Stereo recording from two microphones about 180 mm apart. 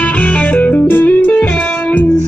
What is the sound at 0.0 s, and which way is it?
Music, 10° left (ahead or behind).